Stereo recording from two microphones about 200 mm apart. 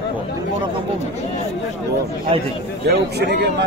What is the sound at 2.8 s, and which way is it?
Speech, 55° right (ahead or behind).